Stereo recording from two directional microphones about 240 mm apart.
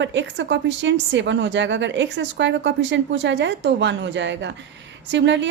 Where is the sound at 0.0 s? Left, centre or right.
Right.